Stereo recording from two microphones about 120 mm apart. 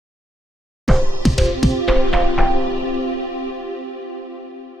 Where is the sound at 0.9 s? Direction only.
Centre (ahead or behind).